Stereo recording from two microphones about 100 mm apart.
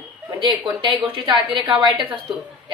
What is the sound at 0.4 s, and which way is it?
A woman's voice, 55° right (ahead or behind).